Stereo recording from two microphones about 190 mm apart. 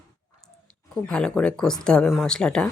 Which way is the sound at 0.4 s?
5° left (ahead or behind).